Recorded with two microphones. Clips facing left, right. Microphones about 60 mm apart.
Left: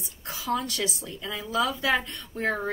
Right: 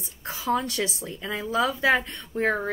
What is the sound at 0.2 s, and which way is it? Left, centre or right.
A woman's voice, right.